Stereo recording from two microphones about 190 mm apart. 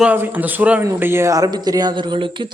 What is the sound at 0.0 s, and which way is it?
Speech, 10° right (ahead or behind).